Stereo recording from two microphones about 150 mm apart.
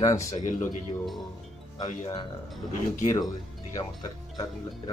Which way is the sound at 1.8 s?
30° left (ahead or behind).